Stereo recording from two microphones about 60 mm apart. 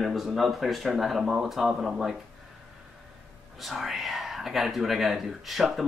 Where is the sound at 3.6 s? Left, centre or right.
Centre.